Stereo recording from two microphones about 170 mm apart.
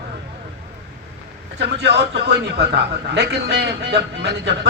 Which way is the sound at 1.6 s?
75° right (ahead or behind).